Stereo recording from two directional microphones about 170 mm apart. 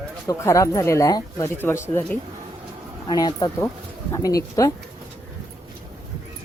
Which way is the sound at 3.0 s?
25° left (ahead or behind).